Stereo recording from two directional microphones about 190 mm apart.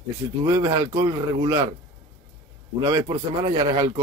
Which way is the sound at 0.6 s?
20° right (ahead or behind).